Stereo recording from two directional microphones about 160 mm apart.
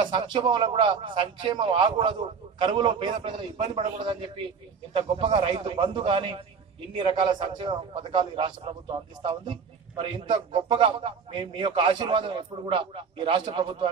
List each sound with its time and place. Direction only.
0.0 s a man's voice: 30° right (ahead or behind)